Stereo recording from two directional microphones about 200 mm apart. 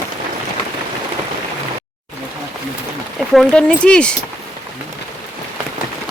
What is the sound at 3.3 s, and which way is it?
Speech, 5° left (ahead or behind).